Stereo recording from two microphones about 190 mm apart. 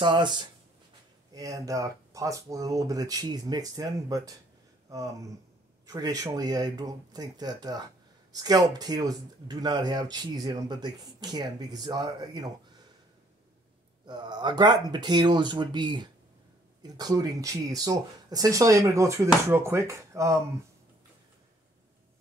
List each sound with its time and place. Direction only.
0.0 s speech: 25° right (ahead or behind)
4.8 s a sound: 15° right (ahead or behind)
5.9 s speech: 20° right (ahead or behind)
14.0 s speech: 20° right (ahead or behind)